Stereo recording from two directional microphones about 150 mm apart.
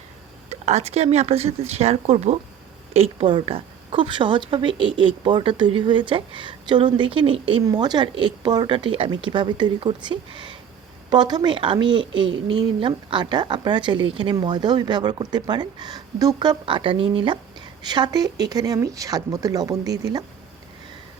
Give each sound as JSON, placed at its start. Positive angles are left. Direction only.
{"t": 0.5, "sound": "a woman's voice", "side_deg": -45}